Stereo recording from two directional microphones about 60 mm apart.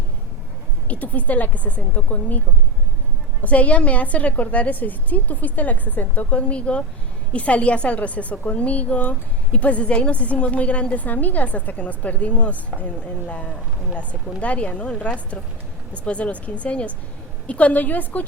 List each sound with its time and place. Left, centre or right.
0.9 s a woman's voice: left
3.4 s a woman's voice: left